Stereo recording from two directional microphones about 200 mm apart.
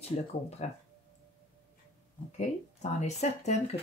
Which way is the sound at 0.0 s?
35° left (ahead or behind).